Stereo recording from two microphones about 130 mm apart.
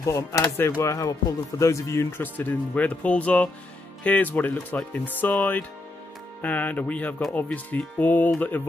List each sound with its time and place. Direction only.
0.0 s speech: 25° left (ahead or behind)